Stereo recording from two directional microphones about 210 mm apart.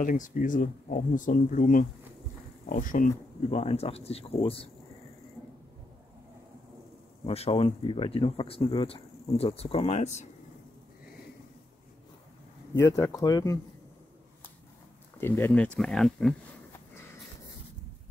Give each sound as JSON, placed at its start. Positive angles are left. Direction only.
{"t": 0.0, "sound": "speech", "side_deg": 40}
{"t": 7.2, "sound": "speech", "side_deg": 25}
{"t": 12.7, "sound": "speech", "side_deg": 15}
{"t": 15.1, "sound": "speech", "side_deg": 10}